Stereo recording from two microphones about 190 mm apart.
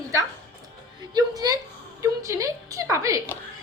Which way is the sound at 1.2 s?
20° right (ahead or behind).